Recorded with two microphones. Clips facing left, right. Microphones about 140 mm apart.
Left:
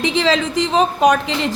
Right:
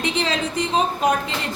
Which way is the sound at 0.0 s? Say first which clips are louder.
Left 6 dB; 90° left.